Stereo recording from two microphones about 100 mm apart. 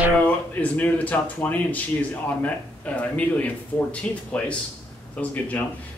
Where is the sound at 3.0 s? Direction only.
15° left (ahead or behind).